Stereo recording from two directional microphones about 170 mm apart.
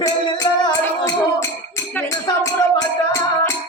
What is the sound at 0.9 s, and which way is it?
Music, 20° left (ahead or behind).